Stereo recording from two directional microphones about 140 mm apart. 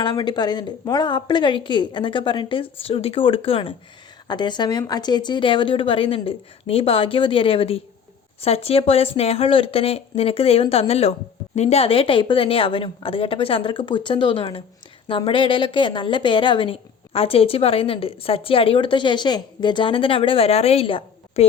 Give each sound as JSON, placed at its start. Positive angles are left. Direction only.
{"t": 0.0, "sound": "a woman's voice", "side_deg": 35}